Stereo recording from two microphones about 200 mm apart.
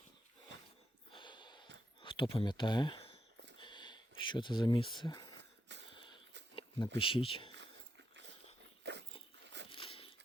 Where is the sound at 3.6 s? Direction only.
25° left (ahead or behind).